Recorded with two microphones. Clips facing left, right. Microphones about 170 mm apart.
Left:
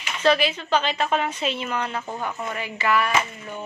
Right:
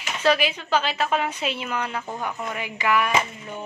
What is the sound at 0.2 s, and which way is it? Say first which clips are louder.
A woman's voice: left 1 dB; 10° right (ahead or behind).